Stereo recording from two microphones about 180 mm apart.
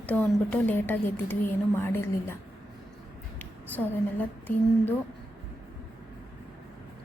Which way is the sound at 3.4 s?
10° left (ahead or behind).